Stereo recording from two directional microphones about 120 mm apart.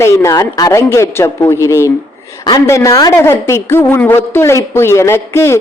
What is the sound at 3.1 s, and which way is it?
A man's voice, 20° left (ahead or behind).